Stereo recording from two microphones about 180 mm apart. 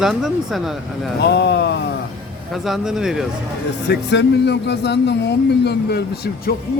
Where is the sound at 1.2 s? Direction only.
70° left (ahead or behind).